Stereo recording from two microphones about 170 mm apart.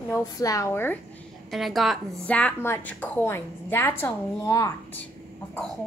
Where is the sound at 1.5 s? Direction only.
Centre (ahead or behind); by 5.0 s 20° left (ahead or behind).